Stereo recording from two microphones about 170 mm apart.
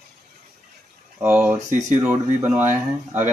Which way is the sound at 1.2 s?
10° right (ahead or behind).